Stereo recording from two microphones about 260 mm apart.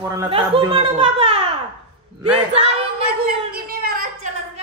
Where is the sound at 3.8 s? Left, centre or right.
Right.